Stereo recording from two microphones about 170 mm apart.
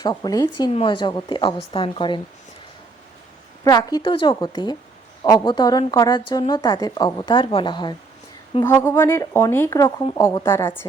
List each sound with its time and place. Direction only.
0.0 s a woman's voice: 20° left (ahead or behind)
0.7 s a woman's voice: 30° left (ahead or behind)
3.6 s a woman's voice: 20° left (ahead or behind)
8.6 s speech: 15° left (ahead or behind)